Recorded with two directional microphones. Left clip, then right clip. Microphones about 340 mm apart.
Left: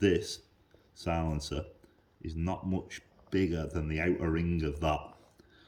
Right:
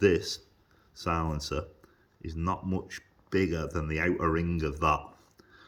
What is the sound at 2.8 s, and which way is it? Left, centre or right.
Speech, centre.